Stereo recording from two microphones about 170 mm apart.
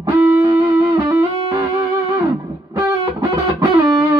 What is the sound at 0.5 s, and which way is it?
Music, 25° right (ahead or behind).